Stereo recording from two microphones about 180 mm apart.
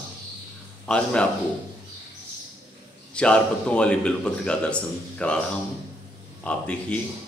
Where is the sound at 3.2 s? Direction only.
5° left (ahead or behind).